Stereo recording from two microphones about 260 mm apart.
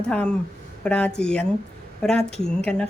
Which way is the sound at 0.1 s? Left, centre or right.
Centre.